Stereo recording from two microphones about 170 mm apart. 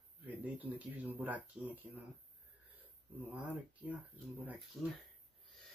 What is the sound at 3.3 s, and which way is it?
Speech, 5° right (ahead or behind).